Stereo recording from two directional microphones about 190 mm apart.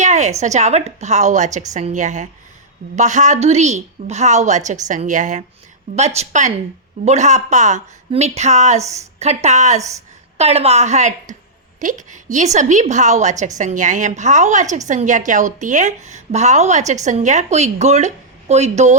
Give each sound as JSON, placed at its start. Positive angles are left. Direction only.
{"t": 0.0, "sound": "a woman's voice", "side_deg": -40}
{"t": 8.8, "sound": "a woman's voice", "side_deg": -15}
{"t": 9.1, "sound": "a woman's voice", "side_deg": -35}